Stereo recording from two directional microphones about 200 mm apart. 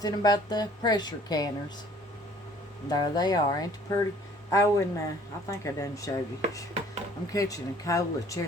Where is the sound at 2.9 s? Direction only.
20° left (ahead or behind).